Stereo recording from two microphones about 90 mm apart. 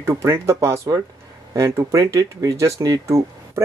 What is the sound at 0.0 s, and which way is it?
Speech, 30° right (ahead or behind).